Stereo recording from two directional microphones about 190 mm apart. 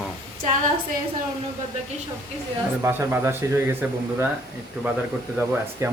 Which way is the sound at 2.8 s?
10° right (ahead or behind).